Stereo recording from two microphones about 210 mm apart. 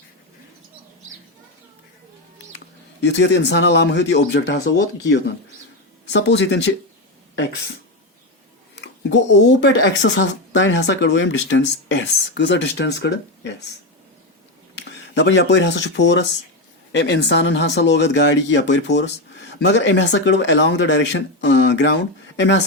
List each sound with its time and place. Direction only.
3.0 s speech: 55° left (ahead or behind)
8.7 s speech: 60° left (ahead or behind)
15.1 s speech: 55° left (ahead or behind)